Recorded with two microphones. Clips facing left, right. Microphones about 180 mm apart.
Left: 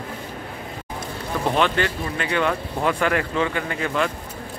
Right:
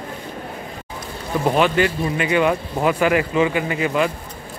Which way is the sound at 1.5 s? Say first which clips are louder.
Right 4 dB; 5° right (ahead or behind).